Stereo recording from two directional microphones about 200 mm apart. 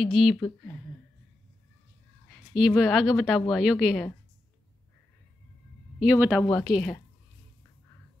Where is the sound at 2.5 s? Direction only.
5° right (ahead or behind).